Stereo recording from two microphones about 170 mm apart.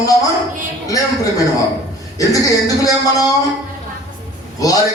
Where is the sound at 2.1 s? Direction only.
20° left (ahead or behind).